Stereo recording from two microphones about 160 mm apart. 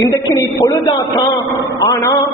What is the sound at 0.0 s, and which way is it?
A man's voice, 25° left (ahead or behind).